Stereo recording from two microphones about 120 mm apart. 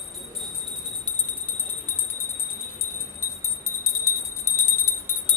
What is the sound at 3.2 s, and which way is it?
Jingle bell, 20° left (ahead or behind).